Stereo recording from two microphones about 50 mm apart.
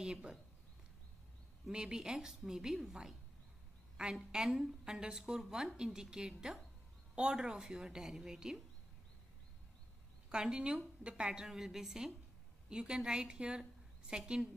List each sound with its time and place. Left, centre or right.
0.0 s speech: centre
1.7 s a woman's voice: centre
10.3 s a woman's voice: centre